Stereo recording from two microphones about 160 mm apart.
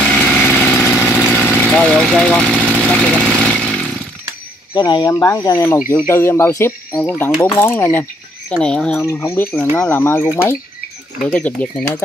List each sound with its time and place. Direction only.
0.1 s engine: 5° left (ahead or behind)
2.4 s speech: 5° left (ahead or behind)
4.7 s speech: 25° left (ahead or behind)
7.0 s speech: 5° left (ahead or behind)